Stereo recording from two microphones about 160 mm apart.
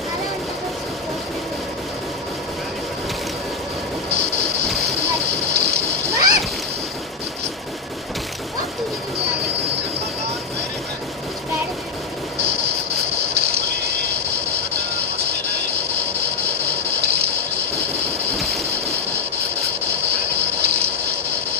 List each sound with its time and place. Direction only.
4.1 s vehicle: 90° right
4.6 s splash: centre (ahead or behind)
4.9 s splash: 90° right
6.1 s splash: 20° right (ahead or behind)
12.4 s vehicle: 90° right